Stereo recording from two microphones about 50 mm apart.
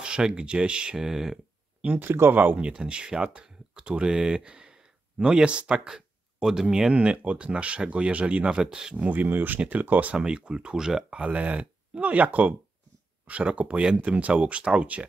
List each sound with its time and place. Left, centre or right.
0.0 s speech: centre
2.0 s speech: right
2.6 s speech: centre
5.9 s speech: centre
8.9 s speech: right
10.1 s speech: centre
11.1 s speech: right